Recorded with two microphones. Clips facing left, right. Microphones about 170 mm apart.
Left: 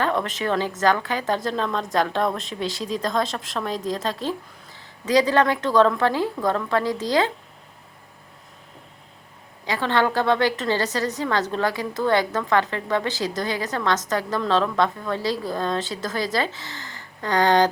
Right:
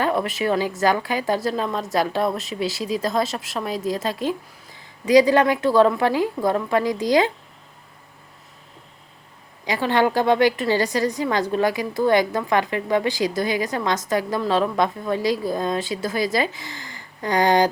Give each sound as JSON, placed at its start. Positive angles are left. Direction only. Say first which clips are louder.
{"t": 0.0, "sound": "a woman's voice", "louder": "right 2 dB", "side_deg": -10}
{"t": 9.6, "sound": "a woman's voice", "louder": "right 2 dB", "side_deg": -15}